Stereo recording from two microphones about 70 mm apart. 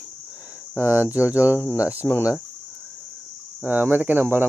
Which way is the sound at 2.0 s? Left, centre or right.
Centre.